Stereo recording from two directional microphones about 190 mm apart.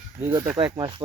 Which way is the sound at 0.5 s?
25° right (ahead or behind).